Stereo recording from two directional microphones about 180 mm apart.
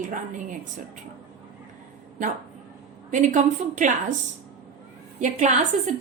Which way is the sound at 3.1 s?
45° right (ahead or behind).